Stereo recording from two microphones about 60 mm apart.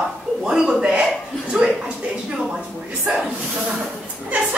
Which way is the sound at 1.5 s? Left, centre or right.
Centre.